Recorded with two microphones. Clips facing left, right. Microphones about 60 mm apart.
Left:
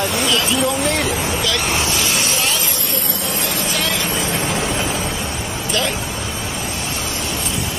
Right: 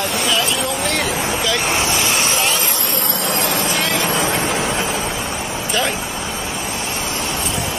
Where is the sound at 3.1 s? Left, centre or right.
Right.